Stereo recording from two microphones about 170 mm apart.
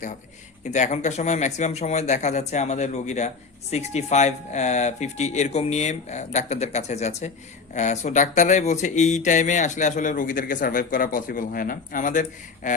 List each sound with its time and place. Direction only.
0.6 s speech: 45° left (ahead or behind)